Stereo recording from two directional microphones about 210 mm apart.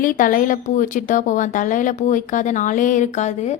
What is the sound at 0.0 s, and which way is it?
Speech, 40° left (ahead or behind).